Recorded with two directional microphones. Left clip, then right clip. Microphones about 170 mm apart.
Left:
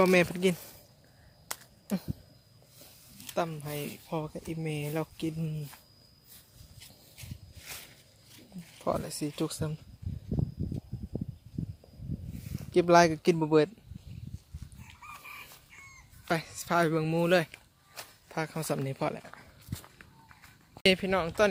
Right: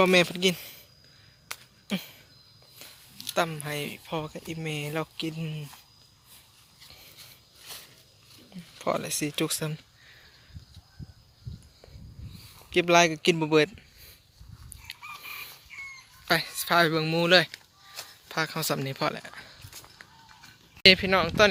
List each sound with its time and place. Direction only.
0.0 s speech: 5° left (ahead or behind)
3.3 s speech: centre (ahead or behind)
8.8 s speech: centre (ahead or behind)
12.7 s speech: 20° left (ahead or behind)
13.1 s speech: 5° left (ahead or behind)
16.2 s speech: 5° left (ahead or behind)
17.5 s a sound: 5° left (ahead or behind)
20.8 s speech: 5° right (ahead or behind)